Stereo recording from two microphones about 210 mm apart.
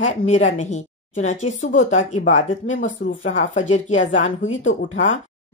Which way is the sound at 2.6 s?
70° left (ahead or behind).